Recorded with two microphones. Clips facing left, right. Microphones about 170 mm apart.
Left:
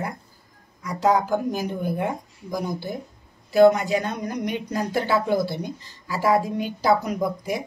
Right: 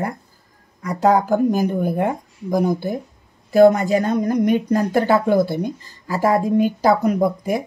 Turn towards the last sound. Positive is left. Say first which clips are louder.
# right 6 dB
turn(degrees=-55)  # may be behind; listen again after turning